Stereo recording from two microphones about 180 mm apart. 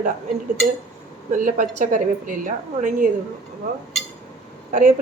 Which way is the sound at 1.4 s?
45° right (ahead or behind).